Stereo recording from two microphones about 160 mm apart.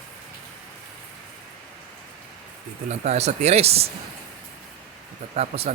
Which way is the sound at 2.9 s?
45° right (ahead or behind).